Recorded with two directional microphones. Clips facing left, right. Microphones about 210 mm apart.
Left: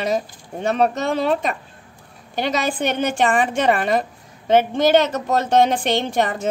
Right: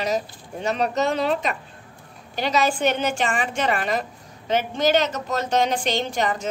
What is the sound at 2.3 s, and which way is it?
A woman's voice, 55° left (ahead or behind).